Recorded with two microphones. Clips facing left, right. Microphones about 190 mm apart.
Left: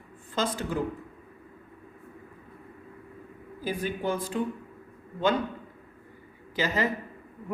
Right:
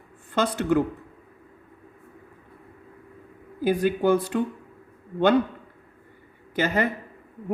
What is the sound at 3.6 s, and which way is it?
Speech, 70° right (ahead or behind).